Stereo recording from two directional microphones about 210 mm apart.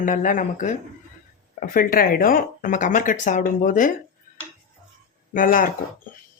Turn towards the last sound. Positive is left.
turn(degrees=40)  # may be behind; listen again after turning